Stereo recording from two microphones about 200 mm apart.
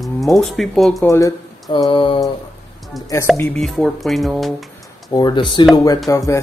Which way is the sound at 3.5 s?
Centre (ahead or behind).